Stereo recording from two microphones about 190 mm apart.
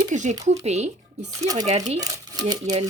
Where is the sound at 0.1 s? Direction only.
40° right (ahead or behind).